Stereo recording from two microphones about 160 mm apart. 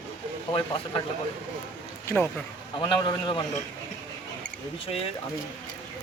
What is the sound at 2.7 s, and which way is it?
Speech, 30° left (ahead or behind).